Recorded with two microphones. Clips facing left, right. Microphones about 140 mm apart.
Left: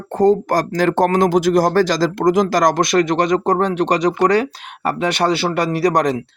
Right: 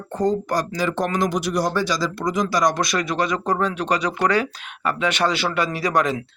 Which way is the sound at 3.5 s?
35° left (ahead or behind).